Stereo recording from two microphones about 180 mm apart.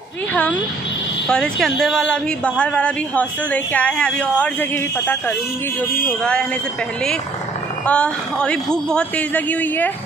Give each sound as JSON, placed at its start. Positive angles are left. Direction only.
{"t": 0.3, "sound": "a man's voice", "side_deg": 10}
{"t": 7.8, "sound": "a man's voice", "side_deg": 5}